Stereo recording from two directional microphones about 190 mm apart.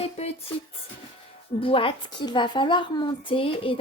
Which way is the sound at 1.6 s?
30° left (ahead or behind).